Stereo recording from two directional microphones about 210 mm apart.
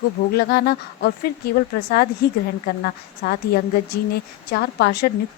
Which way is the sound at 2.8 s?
50° left (ahead or behind).